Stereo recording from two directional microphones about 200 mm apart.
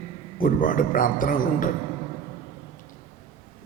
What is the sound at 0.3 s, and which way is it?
A man's voice, 45° left (ahead or behind).